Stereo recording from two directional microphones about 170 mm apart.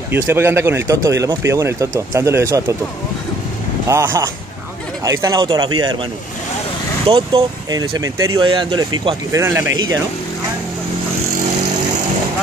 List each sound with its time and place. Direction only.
0.1 s speech: 10° right (ahead or behind)
3.8 s speech: 15° right (ahead or behind)
7.1 s speech: 35° right (ahead or behind)
7.7 s speech: 20° right (ahead or behind)